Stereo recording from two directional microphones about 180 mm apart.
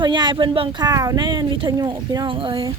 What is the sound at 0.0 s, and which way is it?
Speech, 25° right (ahead or behind).